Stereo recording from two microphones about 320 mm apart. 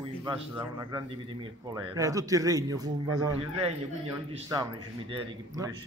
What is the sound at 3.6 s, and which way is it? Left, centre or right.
A man's voice, centre.